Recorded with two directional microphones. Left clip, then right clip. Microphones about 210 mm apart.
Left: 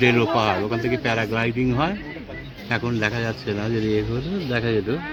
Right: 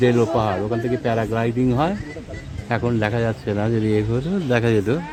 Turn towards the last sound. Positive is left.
turn(degrees=-50)  # may be behind; listen again after turning